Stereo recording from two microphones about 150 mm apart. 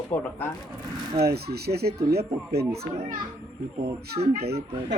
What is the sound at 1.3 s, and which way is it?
Speech, 90° right.